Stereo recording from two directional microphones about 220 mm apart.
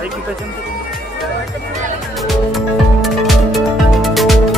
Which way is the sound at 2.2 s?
Centre (ahead or behind).